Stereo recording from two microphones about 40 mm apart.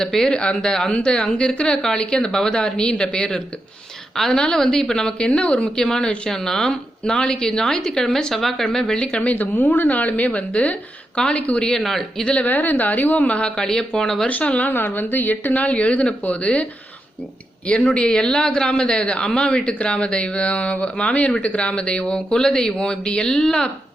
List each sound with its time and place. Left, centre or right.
0.0 s a man's voice: centre
5.7 s a woman's voice: centre
9.2 s speech: left
11.1 s a man's voice: left
11.8 s a woman's voice: centre
12.2 s a man's voice: left
12.5 s a woman's voice: left
13.4 s a woman's voice: centre
14.3 s speech: left
14.7 s speech: left
17.7 s a man's voice: left; by 23.6 s centre